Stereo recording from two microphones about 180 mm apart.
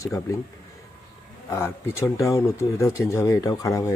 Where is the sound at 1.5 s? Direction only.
15° left (ahead or behind).